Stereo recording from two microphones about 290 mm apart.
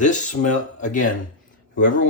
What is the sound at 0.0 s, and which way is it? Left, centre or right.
Speech, left.